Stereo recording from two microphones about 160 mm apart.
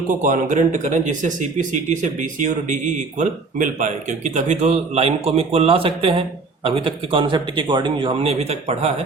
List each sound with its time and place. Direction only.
0.1 s speech: 50° right (ahead or behind)